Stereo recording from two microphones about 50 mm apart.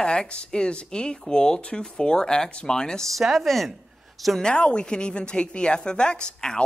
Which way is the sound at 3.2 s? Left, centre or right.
Centre.